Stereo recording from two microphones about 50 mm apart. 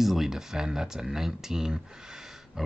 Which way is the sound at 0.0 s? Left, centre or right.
Centre.